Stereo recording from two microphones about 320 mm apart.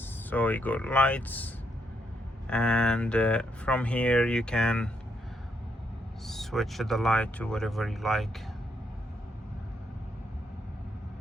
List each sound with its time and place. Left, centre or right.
0.0 s speech: centre
6.2 s speech: centre